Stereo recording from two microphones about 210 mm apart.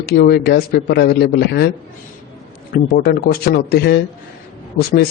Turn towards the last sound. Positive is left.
turn(degrees=45)  # may be behind; listen again after turning